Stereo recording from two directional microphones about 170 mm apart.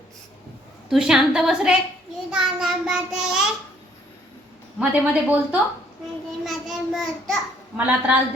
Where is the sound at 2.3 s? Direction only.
5° right (ahead or behind).